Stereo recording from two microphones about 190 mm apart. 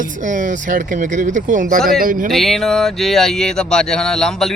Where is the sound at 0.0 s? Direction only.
45° right (ahead or behind).